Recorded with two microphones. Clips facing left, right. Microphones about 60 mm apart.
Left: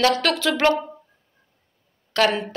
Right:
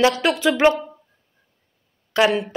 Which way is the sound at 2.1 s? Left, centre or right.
Centre.